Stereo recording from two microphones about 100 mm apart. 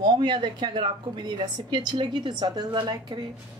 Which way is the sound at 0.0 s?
45° right (ahead or behind).